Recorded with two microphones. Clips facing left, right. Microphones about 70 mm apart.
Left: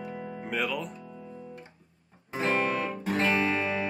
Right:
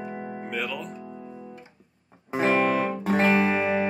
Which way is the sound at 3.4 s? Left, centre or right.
Right.